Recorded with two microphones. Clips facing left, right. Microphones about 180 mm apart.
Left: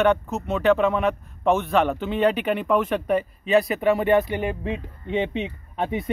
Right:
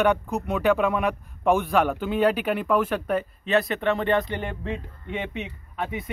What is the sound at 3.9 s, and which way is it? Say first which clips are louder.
Speech: left 5 dB; 15° left (ahead or behind).